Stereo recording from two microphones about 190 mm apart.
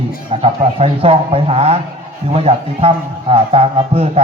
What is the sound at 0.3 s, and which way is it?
A man's voice, 30° right (ahead or behind).